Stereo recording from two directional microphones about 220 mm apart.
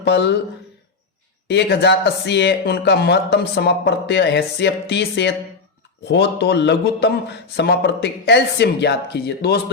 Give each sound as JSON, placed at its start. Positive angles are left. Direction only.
{"t": 0.0, "sound": "speech", "side_deg": 50}
{"t": 1.5, "sound": "speech", "side_deg": 50}